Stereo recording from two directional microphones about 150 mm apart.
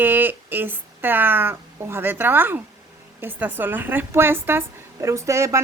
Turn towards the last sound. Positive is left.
turn(degrees=-20)  # may be behind; listen again after turning